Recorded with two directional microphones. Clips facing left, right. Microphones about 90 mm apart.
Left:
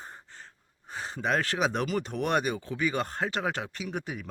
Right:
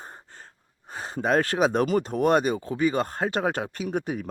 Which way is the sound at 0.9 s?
40° right (ahead or behind).